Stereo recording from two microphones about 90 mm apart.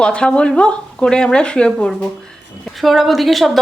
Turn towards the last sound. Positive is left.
turn(degrees=0)  # may be behind; listen again after turning